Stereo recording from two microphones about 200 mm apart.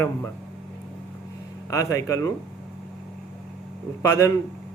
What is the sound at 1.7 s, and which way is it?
Speech, 15° left (ahead or behind).